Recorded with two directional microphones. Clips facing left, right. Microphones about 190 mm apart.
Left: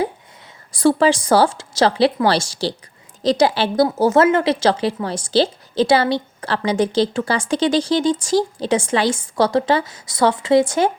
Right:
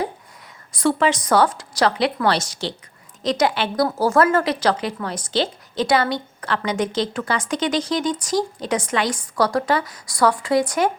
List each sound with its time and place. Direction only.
0.7 s speech: 35° left (ahead or behind)
3.8 s a woman's voice: 20° left (ahead or behind)